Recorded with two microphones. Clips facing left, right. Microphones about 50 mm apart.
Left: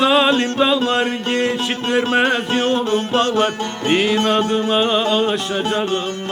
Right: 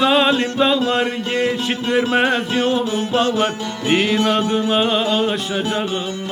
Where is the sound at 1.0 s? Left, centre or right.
Left.